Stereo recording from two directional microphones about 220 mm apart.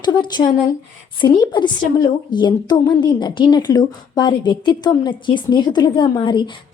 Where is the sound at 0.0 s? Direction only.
20° left (ahead or behind).